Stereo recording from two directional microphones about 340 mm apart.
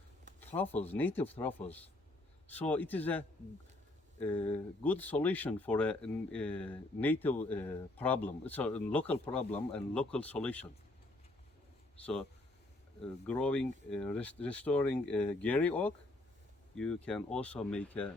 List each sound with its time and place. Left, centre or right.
0.3 s a sound: centre
0.9 s speech: centre
9.3 s speech: centre
9.7 s speech: centre
13.2 s speech: centre